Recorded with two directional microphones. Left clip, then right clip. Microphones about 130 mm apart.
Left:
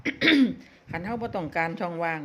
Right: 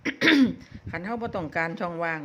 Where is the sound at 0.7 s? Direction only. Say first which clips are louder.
Even; 5° right (ahead or behind).